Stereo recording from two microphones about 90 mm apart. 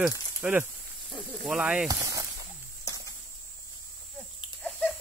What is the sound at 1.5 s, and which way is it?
Speech, 10° right (ahead or behind).